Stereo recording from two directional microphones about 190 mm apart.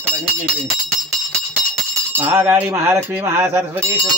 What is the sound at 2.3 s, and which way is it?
Speech, 10° right (ahead or behind).